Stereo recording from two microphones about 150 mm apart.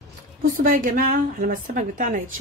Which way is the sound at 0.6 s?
65° right (ahead or behind).